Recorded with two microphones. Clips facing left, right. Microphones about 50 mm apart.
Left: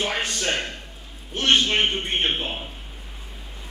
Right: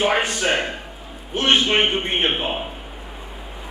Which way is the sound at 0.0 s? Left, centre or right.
Centre.